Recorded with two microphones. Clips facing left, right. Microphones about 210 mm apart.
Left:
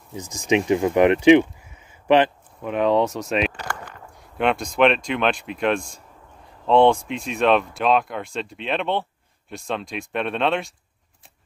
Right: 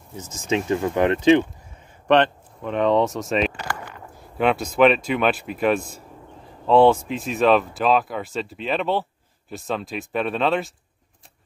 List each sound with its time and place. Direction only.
0.1 s speech: 15° left (ahead or behind)
2.0 s speech: 5° left (ahead or behind)